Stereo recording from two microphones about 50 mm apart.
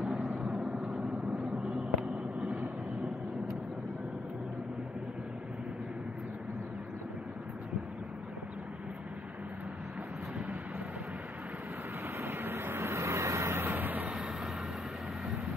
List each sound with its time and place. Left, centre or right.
0.0 s vehicle: centre
12.2 s vehicle: right
13.7 s vehicle: right